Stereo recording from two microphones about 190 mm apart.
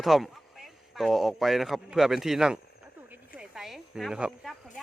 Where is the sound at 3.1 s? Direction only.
5° right (ahead or behind).